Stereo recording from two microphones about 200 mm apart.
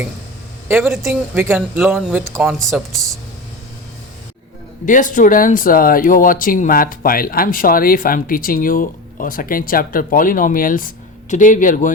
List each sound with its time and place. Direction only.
0.7 s speech: 10° right (ahead or behind)
4.9 s speech: 40° left (ahead or behind)